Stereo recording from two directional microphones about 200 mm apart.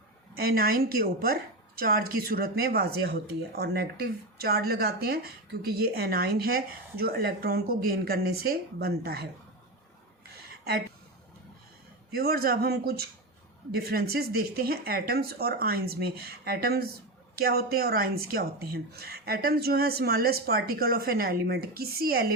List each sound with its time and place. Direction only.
0.3 s a woman's voice: 50° right (ahead or behind)
12.1 s a woman's voice: 50° right (ahead or behind)